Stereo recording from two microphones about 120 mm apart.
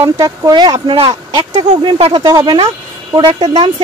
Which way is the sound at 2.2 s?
35° right (ahead or behind).